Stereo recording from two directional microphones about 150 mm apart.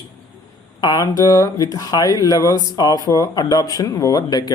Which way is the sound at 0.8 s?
25° left (ahead or behind).